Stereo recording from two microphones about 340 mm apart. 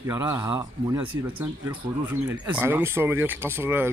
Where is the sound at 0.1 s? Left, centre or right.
Centre.